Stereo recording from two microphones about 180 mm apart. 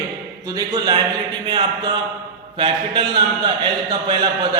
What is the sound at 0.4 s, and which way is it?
A man's voice, 20° right (ahead or behind).